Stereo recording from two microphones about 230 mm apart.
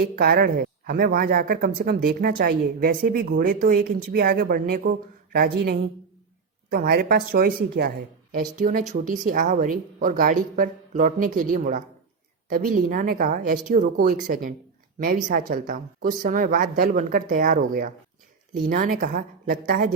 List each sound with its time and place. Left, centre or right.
0.0 s speech: right